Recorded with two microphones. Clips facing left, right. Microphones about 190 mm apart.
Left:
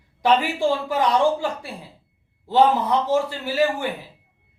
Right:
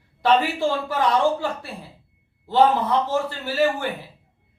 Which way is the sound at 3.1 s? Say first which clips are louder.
Left 3 dB; 15° left (ahead or behind).